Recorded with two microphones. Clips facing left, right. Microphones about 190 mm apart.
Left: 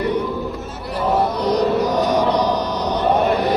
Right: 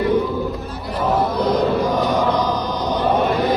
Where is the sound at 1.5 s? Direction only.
75° left (ahead or behind).